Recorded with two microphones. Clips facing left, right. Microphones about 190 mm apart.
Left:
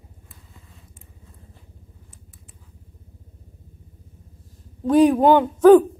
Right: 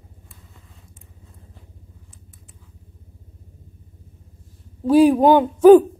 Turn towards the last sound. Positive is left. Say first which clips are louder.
# right 2 dB
turn(degrees=-10)  # may be behind; listen again after turning